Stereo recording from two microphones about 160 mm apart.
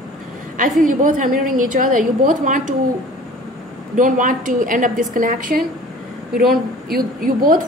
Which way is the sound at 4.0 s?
55° right (ahead or behind).